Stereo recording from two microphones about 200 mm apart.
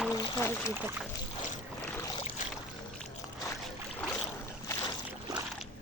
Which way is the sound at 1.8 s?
10° left (ahead or behind).